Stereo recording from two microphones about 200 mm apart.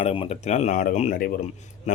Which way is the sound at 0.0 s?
30° left (ahead or behind).